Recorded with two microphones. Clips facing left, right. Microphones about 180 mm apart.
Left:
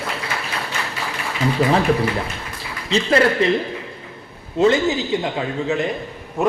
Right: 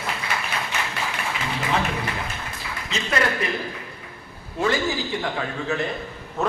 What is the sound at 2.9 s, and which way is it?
Speech, 30° left (ahead or behind).